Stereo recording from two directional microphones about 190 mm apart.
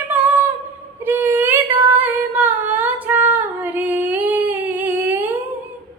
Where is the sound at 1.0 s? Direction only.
10° right (ahead or behind).